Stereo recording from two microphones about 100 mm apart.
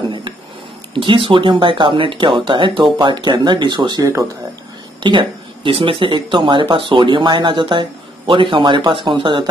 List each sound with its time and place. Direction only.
0.9 s speech: 55° right (ahead or behind)
4.0 s speech: 35° right (ahead or behind)
5.0 s speech: 55° right (ahead or behind)